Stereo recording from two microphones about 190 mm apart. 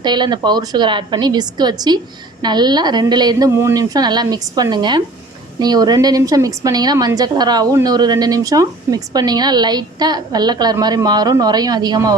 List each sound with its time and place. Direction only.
0.0 s a woman's voice: 25° right (ahead or behind)